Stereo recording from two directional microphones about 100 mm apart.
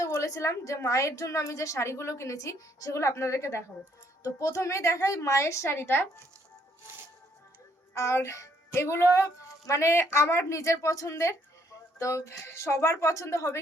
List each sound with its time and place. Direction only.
0.0 s a woman's voice: 30° left (ahead or behind)
7.9 s speech: 30° left (ahead or behind)